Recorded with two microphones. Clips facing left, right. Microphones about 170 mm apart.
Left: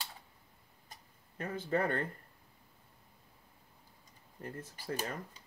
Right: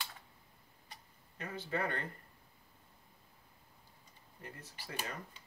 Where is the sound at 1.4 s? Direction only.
50° left (ahead or behind).